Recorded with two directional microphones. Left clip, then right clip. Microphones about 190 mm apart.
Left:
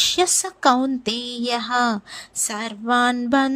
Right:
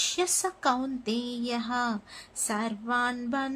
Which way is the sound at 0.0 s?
35° left (ahead or behind).